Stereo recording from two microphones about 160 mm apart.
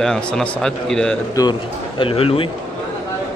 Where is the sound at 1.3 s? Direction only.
25° left (ahead or behind).